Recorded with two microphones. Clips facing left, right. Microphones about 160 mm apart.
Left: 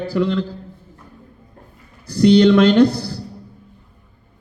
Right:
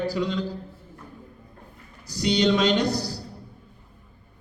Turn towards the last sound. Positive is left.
turn(degrees=55)  # may be behind; listen again after turning